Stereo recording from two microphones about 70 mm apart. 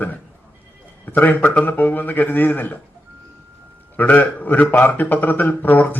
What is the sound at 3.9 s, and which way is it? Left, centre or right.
A man's voice, left.